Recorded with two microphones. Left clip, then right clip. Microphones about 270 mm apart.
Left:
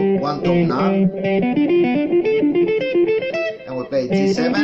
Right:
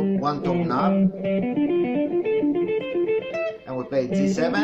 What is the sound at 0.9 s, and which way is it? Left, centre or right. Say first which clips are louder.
Music: left 5 dB; left.